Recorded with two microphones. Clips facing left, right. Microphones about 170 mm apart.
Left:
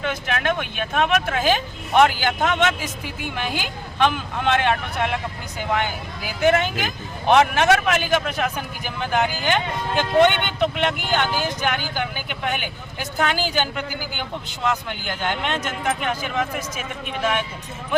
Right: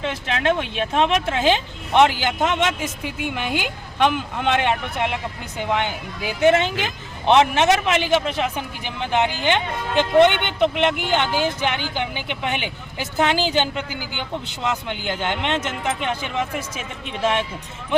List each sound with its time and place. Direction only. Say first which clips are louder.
0.0 s a man's voice: right 2 dB; 25° right (ahead or behind)
3.0 s a woman's voice: right 4 dB; 65° right (ahead or behind)
3.9 s speech: right 1 dB; 15° right (ahead or behind)
6.5 s a man's voice: right 2 dB; 25° right (ahead or behind)